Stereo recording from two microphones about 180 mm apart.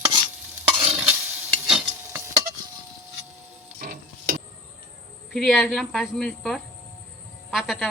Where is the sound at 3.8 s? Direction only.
55° right (ahead or behind).